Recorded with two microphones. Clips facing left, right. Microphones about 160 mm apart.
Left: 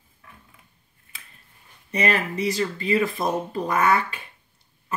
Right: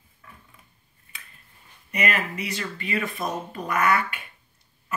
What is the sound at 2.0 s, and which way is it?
Speech, 35° left (ahead or behind).